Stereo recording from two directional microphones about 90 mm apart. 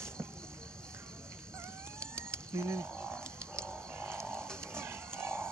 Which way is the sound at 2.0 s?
30° right (ahead or behind).